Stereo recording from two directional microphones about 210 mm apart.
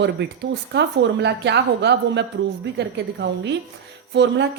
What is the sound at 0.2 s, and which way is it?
A woman's voice, 55° right (ahead or behind).